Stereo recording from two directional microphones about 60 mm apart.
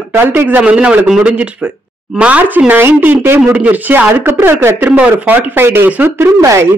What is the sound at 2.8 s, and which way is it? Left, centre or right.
Speech, right.